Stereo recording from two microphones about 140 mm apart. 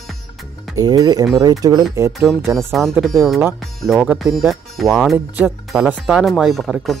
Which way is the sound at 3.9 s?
10° right (ahead or behind).